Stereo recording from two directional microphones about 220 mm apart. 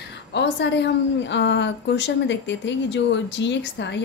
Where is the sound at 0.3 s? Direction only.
50° left (ahead or behind).